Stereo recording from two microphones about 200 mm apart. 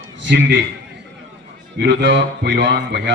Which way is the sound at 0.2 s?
65° right (ahead or behind).